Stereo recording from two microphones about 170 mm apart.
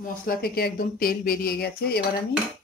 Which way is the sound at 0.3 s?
65° left (ahead or behind).